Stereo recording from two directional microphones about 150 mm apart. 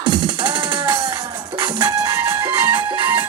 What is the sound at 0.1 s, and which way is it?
Music, 30° right (ahead or behind).